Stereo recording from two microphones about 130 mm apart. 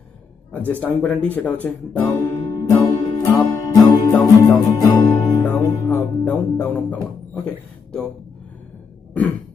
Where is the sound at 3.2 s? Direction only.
25° left (ahead or behind).